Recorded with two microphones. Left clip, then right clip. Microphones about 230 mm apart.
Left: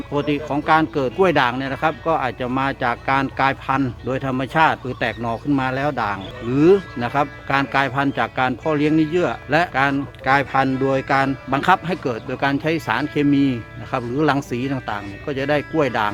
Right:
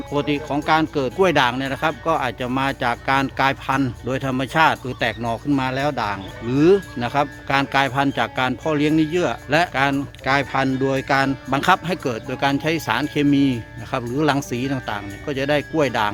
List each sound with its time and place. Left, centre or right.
0.1 s speech: centre